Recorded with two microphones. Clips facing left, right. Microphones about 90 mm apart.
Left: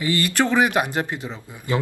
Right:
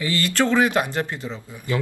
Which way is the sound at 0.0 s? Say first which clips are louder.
Left 1 dB; 20° left (ahead or behind).